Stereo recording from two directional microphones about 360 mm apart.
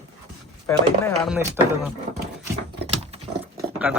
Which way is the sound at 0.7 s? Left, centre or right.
Centre.